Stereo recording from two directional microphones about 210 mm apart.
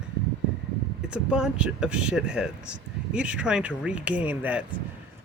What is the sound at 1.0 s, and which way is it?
Speech, 5° right (ahead or behind).